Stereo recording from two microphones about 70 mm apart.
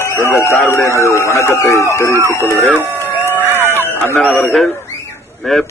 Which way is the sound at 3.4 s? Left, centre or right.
Right.